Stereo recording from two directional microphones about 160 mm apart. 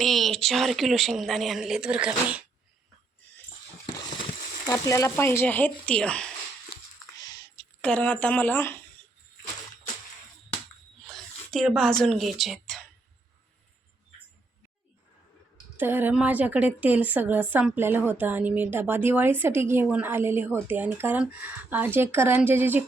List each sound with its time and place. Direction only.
0.0 s speech: centre (ahead or behind)
4.7 s speech: 20° left (ahead or behind)
7.2 s typing: 25° left (ahead or behind)
7.8 s speech: 5° left (ahead or behind)
11.0 s a sound: centre (ahead or behind)
15.8 s a woman's voice: 15° right (ahead or behind)